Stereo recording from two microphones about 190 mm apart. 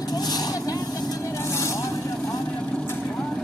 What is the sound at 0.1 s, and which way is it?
Vehicle, 20° left (ahead or behind).